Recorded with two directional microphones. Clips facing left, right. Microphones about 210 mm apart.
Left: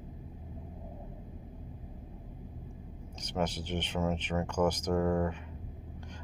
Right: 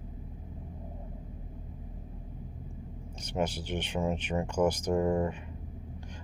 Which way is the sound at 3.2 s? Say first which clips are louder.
Right 2 dB; 10° right (ahead or behind).